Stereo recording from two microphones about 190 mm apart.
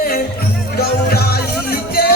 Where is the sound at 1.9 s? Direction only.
55° left (ahead or behind).